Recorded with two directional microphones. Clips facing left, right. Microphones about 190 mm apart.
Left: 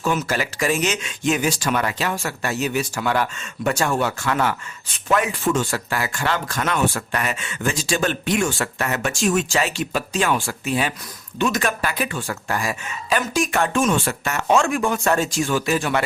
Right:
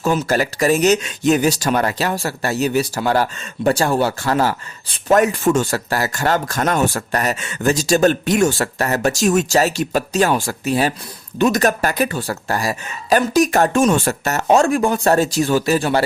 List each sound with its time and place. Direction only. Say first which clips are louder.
0.0 s speech: right 5 dB; 35° right (ahead or behind)